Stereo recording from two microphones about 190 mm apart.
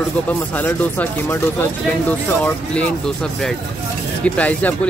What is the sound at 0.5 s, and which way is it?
Speech, 10° left (ahead or behind).